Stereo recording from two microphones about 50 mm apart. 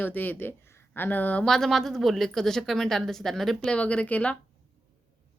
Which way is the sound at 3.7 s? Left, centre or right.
Left.